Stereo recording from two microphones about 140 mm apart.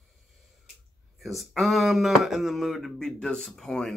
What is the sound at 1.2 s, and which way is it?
Speech, centre (ahead or behind).